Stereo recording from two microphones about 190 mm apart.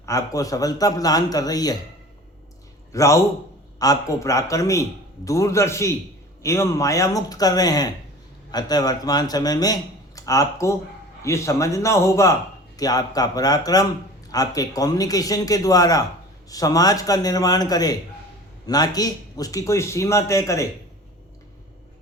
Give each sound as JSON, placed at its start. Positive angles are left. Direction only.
{"t": 0.0, "sound": "a man's voice", "side_deg": 15}
{"t": 2.9, "sound": "a man's voice", "side_deg": 15}